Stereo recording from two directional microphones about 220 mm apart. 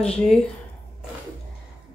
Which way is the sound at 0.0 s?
5° left (ahead or behind).